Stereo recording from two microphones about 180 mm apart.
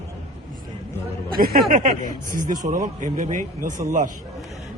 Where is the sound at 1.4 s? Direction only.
50° right (ahead or behind).